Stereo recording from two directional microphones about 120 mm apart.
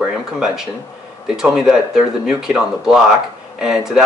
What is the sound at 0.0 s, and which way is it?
Speech, 5° right (ahead or behind).